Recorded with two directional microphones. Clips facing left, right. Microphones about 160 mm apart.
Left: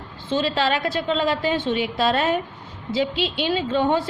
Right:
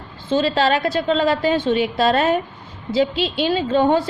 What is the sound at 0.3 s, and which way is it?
A woman's voice, 40° right (ahead or behind).